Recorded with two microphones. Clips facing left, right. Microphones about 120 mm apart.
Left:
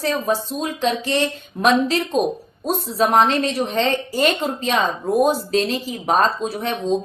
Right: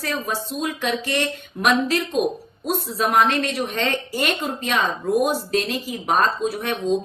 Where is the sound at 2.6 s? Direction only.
30° left (ahead or behind).